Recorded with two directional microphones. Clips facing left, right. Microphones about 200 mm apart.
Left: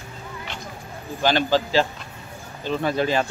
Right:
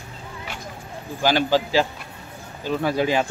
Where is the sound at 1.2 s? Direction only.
10° right (ahead or behind).